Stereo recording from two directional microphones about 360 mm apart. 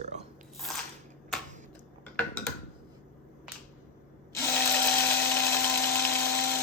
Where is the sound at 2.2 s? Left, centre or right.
Centre.